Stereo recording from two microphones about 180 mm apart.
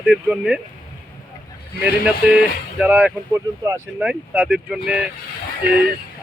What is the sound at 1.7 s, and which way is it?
Speech, 65° left (ahead or behind).